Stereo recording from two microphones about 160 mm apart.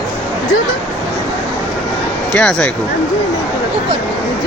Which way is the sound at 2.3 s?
5° left (ahead or behind).